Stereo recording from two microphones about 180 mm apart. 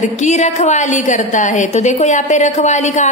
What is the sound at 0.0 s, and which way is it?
A woman's voice, 40° left (ahead or behind).